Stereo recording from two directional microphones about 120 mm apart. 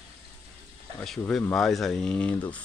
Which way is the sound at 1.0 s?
10° left (ahead or behind).